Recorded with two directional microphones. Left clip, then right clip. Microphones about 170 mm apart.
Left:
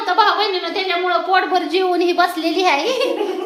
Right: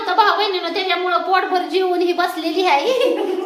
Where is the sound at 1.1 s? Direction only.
15° left (ahead or behind).